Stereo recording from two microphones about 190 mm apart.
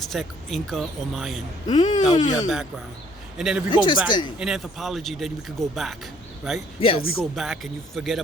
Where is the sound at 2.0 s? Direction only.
20° left (ahead or behind).